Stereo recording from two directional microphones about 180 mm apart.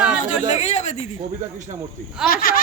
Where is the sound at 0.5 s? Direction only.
40° left (ahead or behind).